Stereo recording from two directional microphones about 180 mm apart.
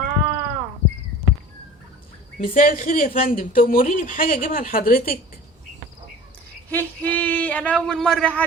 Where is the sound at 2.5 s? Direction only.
50° left (ahead or behind).